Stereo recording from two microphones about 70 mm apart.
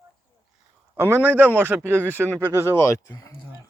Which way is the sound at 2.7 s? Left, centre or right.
Left.